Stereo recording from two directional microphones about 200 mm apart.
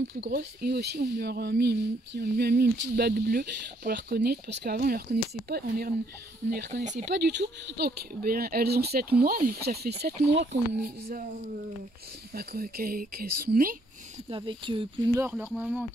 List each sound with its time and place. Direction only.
0.1 s speech: 50° right (ahead or behind)
6.8 s speech: 35° right (ahead or behind)
7.1 s speech: 60° right (ahead or behind)
14.3 s speech: 25° right (ahead or behind)
15.2 s speech: 5° right (ahead or behind)